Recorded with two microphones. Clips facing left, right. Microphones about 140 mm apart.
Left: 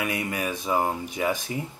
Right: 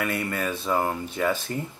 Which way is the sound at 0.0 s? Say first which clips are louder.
Right 1 dB; 15° left (ahead or behind).